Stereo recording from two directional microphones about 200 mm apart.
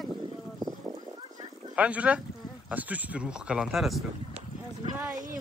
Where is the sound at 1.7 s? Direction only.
5° right (ahead or behind).